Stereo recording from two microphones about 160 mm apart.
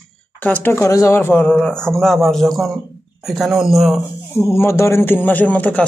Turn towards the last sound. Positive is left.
turn(degrees=10)  # may be behind; listen again after turning